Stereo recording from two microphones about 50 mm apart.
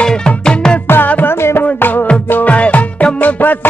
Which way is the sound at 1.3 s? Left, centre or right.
Left.